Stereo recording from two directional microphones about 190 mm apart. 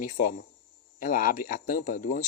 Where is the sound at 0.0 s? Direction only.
45° left (ahead or behind).